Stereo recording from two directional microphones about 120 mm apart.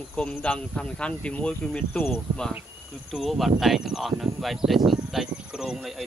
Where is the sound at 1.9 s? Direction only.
20° left (ahead or behind).